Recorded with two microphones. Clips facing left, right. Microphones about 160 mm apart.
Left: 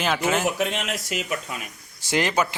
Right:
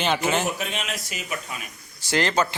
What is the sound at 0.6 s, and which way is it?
Speech, 70° left (ahead or behind).